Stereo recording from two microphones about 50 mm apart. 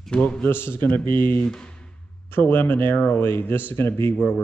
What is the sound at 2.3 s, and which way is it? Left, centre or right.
Speech, left.